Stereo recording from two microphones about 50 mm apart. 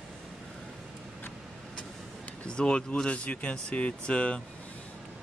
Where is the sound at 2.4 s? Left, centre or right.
Centre.